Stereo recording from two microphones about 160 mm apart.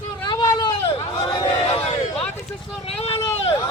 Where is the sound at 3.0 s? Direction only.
40° left (ahead or behind).